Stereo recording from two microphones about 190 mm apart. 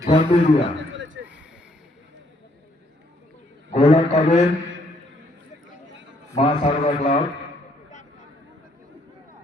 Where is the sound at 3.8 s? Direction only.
35° left (ahead or behind).